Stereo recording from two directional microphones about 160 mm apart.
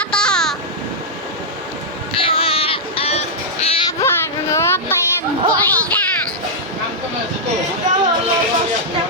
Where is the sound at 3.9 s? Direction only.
15° left (ahead or behind).